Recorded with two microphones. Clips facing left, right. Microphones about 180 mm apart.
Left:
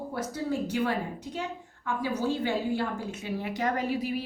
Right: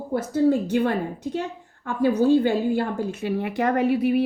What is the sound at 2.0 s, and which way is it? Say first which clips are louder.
A woman's voice: right 12 dB; 60° right (ahead or behind).